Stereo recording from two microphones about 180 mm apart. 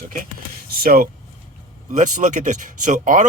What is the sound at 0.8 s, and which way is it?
Speech, 55° right (ahead or behind).